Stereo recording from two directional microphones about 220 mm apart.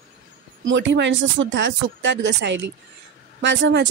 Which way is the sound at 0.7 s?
55° right (ahead or behind).